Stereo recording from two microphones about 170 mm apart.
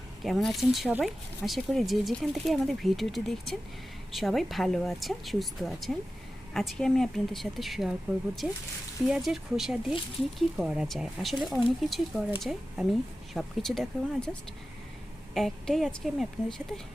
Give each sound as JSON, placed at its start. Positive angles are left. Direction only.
{"t": 0.2, "sound": "speech", "side_deg": 0}
{"t": 15.4, "sound": "speech", "side_deg": 0}